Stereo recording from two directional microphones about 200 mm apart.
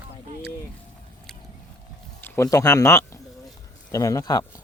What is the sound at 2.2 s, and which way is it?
Speech, 15° left (ahead or behind).